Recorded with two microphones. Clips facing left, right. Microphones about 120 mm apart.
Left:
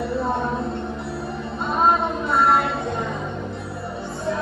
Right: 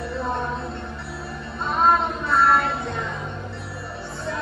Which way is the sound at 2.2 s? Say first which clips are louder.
Left 1 dB; 20° left (ahead or behind).